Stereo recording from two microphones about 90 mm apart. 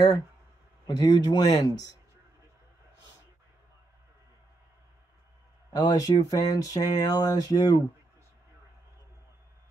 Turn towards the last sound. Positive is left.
turn(degrees=45)  # may be behind; listen again after turning